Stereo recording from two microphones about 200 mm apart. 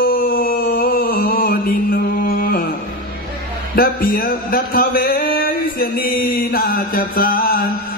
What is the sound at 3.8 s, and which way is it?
A man's voice, 45° left (ahead or behind).